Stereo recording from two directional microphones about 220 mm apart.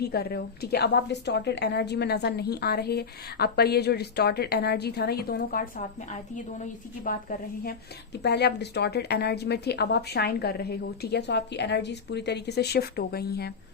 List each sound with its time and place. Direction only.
0.0 s a woman's voice: 45° left (ahead or behind)